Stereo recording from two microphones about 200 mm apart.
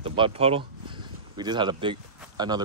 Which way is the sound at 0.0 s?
25° right (ahead or behind).